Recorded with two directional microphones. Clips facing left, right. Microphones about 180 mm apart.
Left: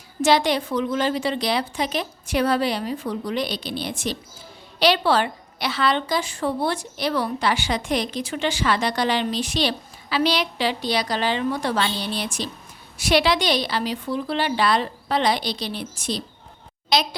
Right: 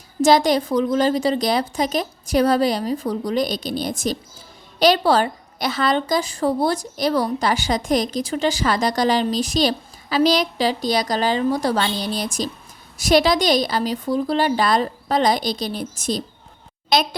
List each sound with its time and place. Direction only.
0.2 s a woman's voice: 40° right (ahead or behind)